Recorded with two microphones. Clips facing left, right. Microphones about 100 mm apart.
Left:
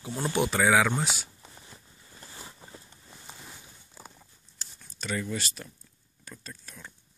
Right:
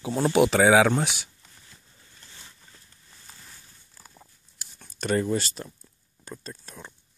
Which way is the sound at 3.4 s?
20° left (ahead or behind).